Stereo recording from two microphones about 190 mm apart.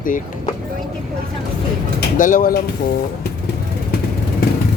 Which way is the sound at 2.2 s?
45° left (ahead or behind).